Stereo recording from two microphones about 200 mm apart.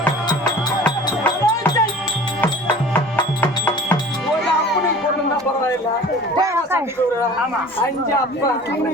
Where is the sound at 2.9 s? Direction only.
10° left (ahead or behind).